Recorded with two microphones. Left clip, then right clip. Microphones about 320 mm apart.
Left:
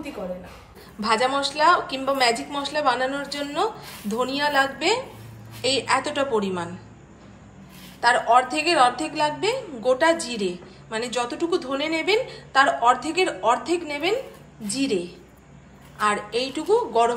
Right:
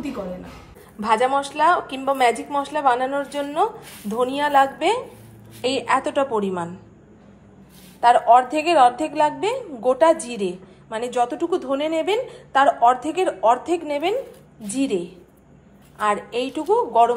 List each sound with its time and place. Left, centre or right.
1.0 s a woman's voice: centre
8.0 s a woman's voice: centre